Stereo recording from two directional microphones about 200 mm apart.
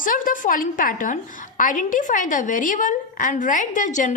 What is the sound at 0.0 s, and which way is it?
A woman's voice, 40° left (ahead or behind).